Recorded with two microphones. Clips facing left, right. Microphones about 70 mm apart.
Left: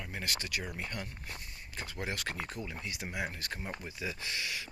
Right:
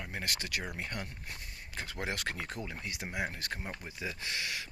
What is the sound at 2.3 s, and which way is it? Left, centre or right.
Speech, right.